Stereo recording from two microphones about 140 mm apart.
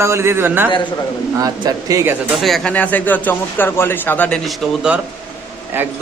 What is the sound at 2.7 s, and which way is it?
A man's voice, 10° left (ahead or behind).